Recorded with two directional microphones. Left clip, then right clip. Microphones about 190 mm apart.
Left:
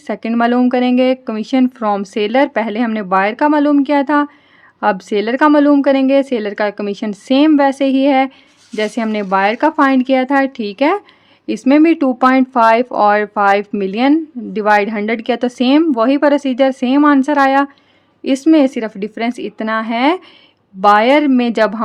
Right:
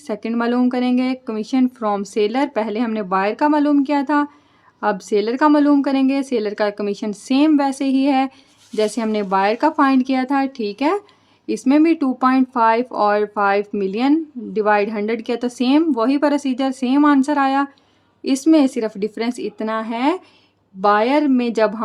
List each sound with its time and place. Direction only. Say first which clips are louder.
0.1 s speech: left 6 dB; 30° left (ahead or behind)